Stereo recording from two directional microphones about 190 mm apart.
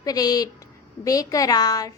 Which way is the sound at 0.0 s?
20° left (ahead or behind).